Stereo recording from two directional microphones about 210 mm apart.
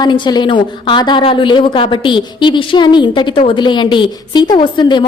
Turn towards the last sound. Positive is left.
turn(degrees=20)  # may be behind; listen again after turning